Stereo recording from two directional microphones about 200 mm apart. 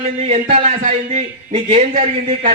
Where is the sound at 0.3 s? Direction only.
35° right (ahead or behind).